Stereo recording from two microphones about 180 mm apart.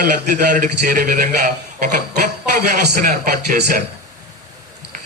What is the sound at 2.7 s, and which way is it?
Speech, 45° right (ahead or behind).